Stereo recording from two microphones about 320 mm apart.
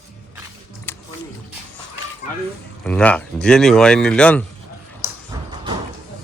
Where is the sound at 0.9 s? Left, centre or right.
Centre.